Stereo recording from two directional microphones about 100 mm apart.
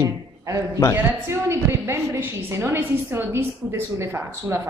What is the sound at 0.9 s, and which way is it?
A woman's voice, 25° right (ahead or behind).